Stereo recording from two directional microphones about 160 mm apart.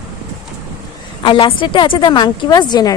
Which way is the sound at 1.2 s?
30° left (ahead or behind).